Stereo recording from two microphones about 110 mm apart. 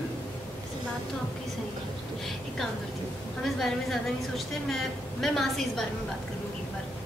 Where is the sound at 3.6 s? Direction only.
Centre (ahead or behind).